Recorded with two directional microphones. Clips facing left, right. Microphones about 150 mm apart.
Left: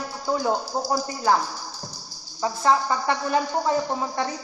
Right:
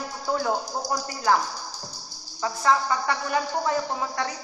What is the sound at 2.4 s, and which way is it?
Speech, 25° left (ahead or behind).